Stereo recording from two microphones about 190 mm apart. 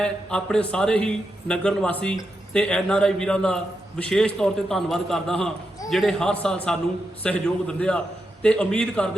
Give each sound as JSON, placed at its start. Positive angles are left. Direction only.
{"t": 0.0, "sound": "a man's voice", "side_deg": 5}